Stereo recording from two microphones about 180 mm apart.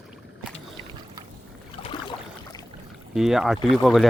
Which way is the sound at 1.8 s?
25° left (ahead or behind).